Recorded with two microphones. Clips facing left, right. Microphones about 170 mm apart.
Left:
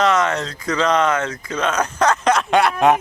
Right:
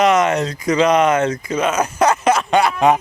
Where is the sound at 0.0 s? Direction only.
15° right (ahead or behind).